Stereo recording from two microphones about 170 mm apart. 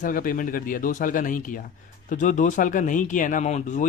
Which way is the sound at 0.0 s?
55° left (ahead or behind).